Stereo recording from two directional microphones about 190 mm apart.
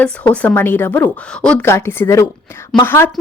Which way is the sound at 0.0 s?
10° left (ahead or behind).